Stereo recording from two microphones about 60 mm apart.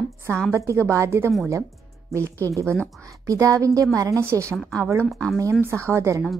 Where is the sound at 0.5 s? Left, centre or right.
Right.